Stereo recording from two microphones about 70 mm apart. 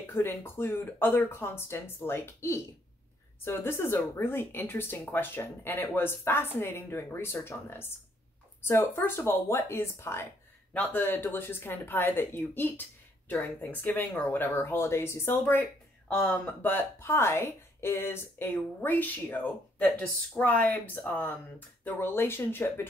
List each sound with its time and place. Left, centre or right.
0.0 s speech: left
10.7 s speech: left
16.1 s speech: centre
16.6 s speech: left